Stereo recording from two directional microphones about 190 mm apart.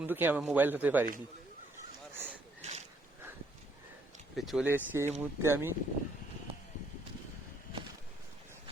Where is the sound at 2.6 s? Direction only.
35° right (ahead or behind).